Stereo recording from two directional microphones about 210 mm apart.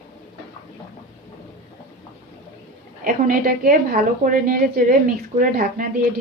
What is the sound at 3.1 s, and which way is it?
A woman's voice, 40° right (ahead or behind).